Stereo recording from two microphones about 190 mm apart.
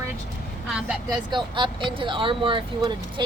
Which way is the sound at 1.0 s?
25° right (ahead or behind).